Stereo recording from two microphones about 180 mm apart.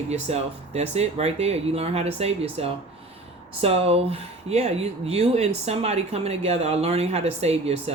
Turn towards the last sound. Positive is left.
turn(degrees=-35)  # may be behind; listen again after turning